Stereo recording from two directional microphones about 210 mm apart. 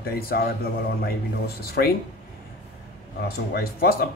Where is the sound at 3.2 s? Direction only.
45° left (ahead or behind).